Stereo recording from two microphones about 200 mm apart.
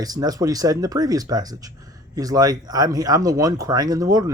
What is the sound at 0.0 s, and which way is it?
Speech, 20° right (ahead or behind).